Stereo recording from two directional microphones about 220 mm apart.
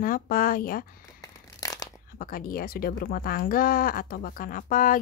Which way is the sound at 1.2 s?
15° left (ahead or behind).